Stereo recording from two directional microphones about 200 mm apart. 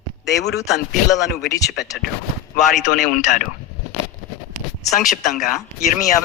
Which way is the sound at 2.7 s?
40° left (ahead or behind).